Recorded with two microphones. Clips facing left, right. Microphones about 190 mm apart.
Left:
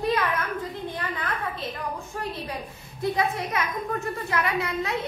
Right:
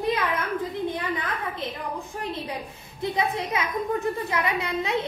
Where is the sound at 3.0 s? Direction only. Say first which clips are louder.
Left 1 dB; 25° right (ahead or behind).